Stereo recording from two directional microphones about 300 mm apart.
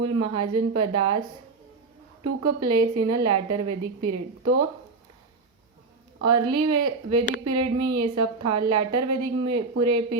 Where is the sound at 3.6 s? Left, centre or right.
Right.